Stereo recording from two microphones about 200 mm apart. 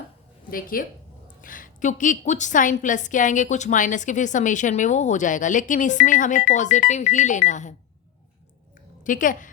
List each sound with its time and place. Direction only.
0.5 s a woman's voice: 45° left (ahead or behind)
9.0 s a woman's voice: 40° left (ahead or behind)